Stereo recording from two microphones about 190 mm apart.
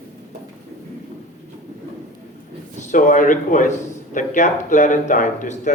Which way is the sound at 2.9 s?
45° left (ahead or behind).